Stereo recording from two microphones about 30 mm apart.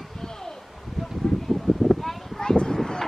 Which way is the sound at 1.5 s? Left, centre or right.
Centre.